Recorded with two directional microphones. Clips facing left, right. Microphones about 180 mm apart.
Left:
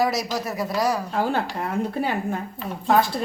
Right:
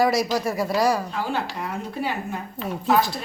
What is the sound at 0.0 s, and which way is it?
Speech, centre (ahead or behind).